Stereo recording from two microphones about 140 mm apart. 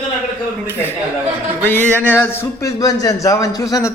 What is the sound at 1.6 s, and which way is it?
A man's voice, 10° left (ahead or behind).